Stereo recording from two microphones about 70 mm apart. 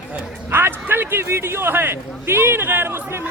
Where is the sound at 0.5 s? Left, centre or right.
Right.